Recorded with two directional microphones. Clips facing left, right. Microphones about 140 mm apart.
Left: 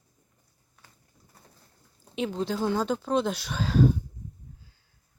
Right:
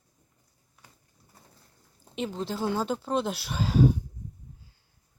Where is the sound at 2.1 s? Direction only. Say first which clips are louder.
Left 3 dB; centre (ahead or behind).